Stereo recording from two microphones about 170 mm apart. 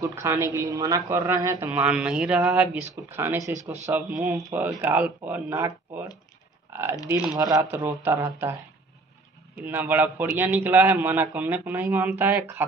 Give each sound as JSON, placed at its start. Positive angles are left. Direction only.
{"t": 0.0, "sound": "a man's voice", "side_deg": -15}
{"t": 6.7, "sound": "typing", "side_deg": -15}
{"t": 7.1, "sound": "speech", "side_deg": -5}
{"t": 7.3, "sound": "a man's voice", "side_deg": -20}
{"t": 9.7, "sound": "a man's voice", "side_deg": -10}